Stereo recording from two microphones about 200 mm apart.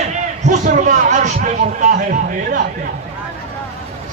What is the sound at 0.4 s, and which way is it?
A man's voice, 35° right (ahead or behind).